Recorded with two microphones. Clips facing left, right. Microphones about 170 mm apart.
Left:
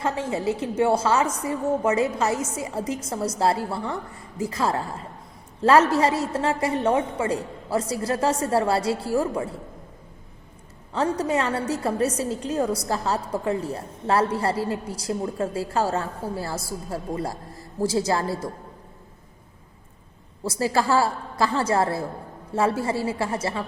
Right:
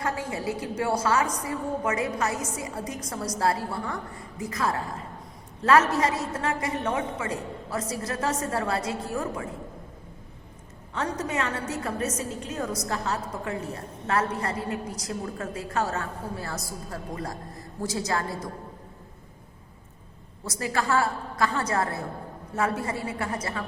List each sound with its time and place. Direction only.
0.0 s a woman's voice: 25° left (ahead or behind)
10.9 s a woman's voice: 35° left (ahead or behind)
20.4 s a woman's voice: 30° left (ahead or behind)